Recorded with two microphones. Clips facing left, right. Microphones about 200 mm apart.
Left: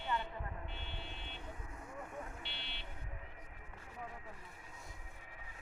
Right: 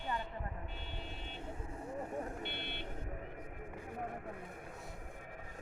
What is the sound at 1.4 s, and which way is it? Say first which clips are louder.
Vehicle: right 5 dB; 30° right (ahead or behind).